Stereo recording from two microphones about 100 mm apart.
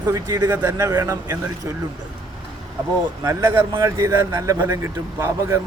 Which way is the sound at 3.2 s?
30° right (ahead or behind).